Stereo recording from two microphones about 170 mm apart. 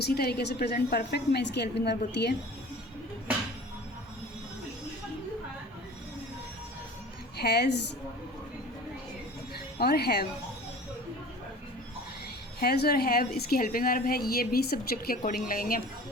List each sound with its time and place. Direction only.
0.0 s a woman's voice: 70° left (ahead or behind)
7.3 s a woman's voice: 75° left (ahead or behind)
9.7 s a woman's voice: 65° left (ahead or behind)
12.5 s a woman's voice: 70° left (ahead or behind)